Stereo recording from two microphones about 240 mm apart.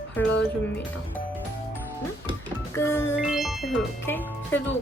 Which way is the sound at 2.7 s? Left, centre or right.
Centre.